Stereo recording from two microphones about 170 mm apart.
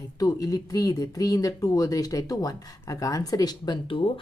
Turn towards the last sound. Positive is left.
turn(degrees=30)  # may be behind; listen again after turning